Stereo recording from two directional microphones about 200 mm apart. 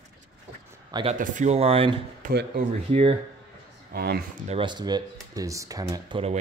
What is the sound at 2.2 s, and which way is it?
Speech, 55° right (ahead or behind).